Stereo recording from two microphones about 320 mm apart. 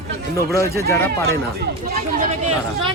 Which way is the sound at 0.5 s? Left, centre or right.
Centre.